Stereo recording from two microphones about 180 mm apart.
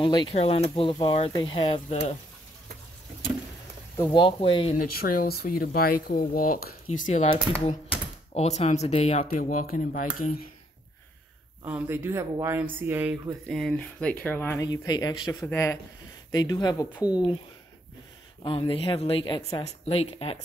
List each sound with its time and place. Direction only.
0.0 s speech: 25° left (ahead or behind)
3.9 s speech: 25° left (ahead or behind)
4.7 s speech: 50° left (ahead or behind)
9.2 s speech: 50° left (ahead or behind)
11.6 s speech: 15° right (ahead or behind)
13.5 s speech: centre (ahead or behind); by 16.8 s 20° left (ahead or behind)
18.4 s speech: 30° left (ahead or behind)